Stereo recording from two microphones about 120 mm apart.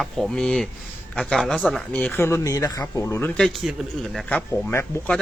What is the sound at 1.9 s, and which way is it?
A man's voice, 15° left (ahead or behind).